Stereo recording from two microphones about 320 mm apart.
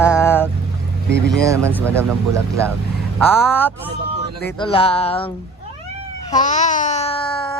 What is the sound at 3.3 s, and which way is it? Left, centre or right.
Speech, centre.